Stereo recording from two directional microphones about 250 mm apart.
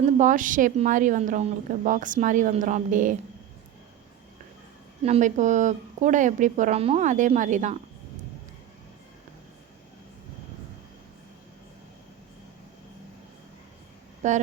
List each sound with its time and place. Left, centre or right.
0.2 s a woman's voice: right
5.0 s a woman's voice: right
14.2 s a woman's voice: right